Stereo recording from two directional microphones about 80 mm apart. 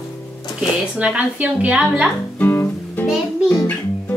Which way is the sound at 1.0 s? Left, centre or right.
Centre.